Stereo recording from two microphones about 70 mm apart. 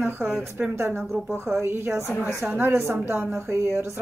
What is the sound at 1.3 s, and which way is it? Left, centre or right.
Speech, right.